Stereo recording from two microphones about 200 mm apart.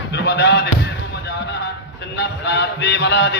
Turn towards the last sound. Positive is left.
turn(degrees=60)  # may be behind; listen again after turning